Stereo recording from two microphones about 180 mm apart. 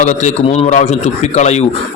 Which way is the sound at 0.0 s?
40° left (ahead or behind).